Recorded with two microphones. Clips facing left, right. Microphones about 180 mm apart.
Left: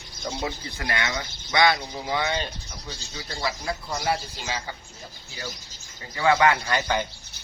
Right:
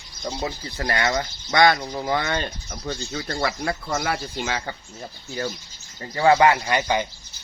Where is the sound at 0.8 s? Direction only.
45° right (ahead or behind); by 4.7 s 65° right (ahead or behind).